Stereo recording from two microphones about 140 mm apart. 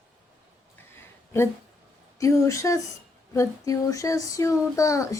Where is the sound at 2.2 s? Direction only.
20° left (ahead or behind).